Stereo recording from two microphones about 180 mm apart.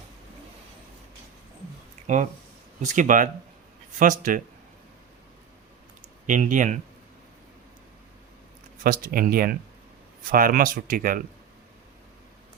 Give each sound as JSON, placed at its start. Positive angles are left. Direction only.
{"t": 2.0, "sound": "a sound", "side_deg": -40}
{"t": 2.8, "sound": "speech", "side_deg": -45}
{"t": 6.2, "sound": "speech", "side_deg": -45}
{"t": 8.8, "sound": "speech", "side_deg": -50}